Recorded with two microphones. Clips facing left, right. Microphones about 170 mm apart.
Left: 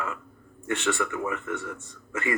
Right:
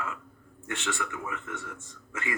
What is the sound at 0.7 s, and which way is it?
Speech, 65° left (ahead or behind).